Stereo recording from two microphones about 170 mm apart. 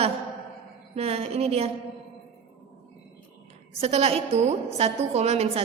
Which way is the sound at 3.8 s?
40° right (ahead or behind).